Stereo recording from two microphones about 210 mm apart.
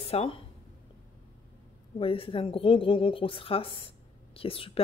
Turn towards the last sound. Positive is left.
turn(degrees=25)  # may be behind; listen again after turning